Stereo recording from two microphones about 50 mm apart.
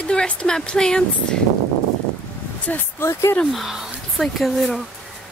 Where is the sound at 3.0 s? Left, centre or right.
Left.